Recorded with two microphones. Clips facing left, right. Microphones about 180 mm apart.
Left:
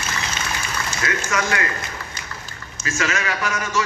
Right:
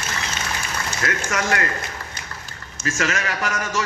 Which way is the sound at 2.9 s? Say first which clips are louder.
Even; 45° right (ahead or behind).